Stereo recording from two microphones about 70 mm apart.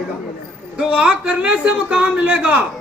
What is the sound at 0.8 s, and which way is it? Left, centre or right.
A man's voice, centre.